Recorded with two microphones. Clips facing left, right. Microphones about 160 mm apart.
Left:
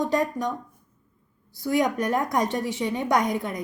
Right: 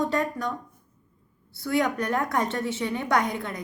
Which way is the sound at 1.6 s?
15° left (ahead or behind).